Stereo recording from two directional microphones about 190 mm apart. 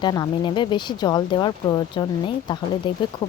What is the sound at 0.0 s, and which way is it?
Speech, 20° left (ahead or behind).